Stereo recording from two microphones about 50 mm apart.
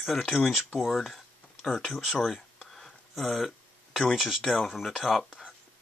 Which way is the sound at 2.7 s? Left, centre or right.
Centre.